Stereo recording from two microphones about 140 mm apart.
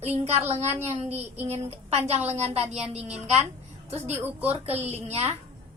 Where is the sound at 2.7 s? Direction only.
10° right (ahead or behind).